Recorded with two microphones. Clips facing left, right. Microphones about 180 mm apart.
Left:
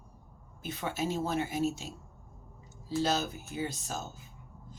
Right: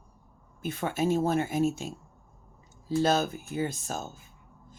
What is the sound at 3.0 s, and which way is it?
Speech, 50° right (ahead or behind).